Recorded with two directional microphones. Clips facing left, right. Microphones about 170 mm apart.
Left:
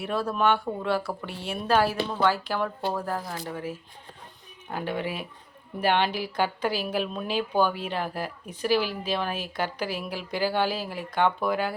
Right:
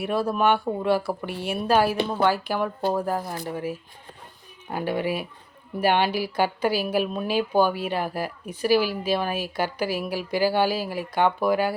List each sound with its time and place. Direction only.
0.0 s speech: 10° right (ahead or behind)